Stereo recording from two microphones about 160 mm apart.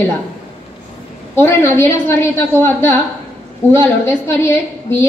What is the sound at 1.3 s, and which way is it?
A woman's voice, 15° left (ahead or behind).